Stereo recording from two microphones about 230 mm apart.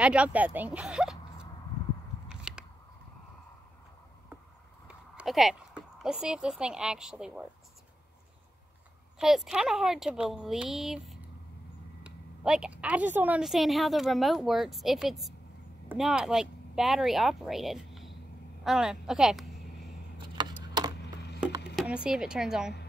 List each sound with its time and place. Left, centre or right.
0.0 s speech: centre
2.2 s biting: centre
4.8 s speech: centre
9.2 s a woman's voice: centre
18.6 s a sound: centre
20.5 s a sound: centre
21.7 s a woman's voice: centre